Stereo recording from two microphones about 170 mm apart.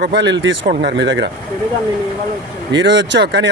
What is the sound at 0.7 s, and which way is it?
Speech, 70° right (ahead or behind).